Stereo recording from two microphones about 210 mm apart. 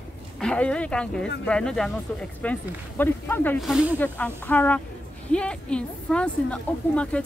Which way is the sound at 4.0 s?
10° left (ahead or behind).